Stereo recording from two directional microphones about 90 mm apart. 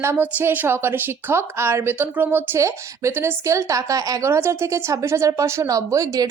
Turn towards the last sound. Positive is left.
turn(degrees=-40)  # may be behind; listen again after turning